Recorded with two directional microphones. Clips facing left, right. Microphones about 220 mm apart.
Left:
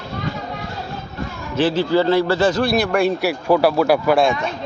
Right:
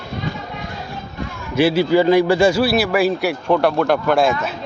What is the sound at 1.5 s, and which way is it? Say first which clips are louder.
A man's voice: right 2 dB; 10° right (ahead or behind).